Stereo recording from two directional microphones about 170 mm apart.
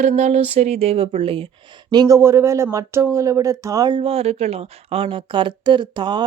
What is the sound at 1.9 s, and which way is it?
Speech, 20° right (ahead or behind).